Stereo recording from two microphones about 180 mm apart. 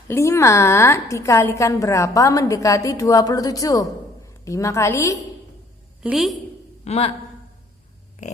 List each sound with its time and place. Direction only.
0.1 s a woman's voice: 15° left (ahead or behind)
6.0 s a woman's voice: 5° right (ahead or behind)
6.8 s speech: 35° left (ahead or behind)